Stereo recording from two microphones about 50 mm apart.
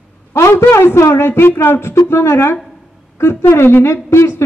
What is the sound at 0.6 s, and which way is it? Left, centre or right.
A woman's voice, left.